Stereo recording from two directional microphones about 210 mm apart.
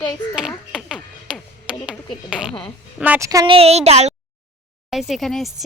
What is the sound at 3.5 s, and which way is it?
Speech, 30° right (ahead or behind).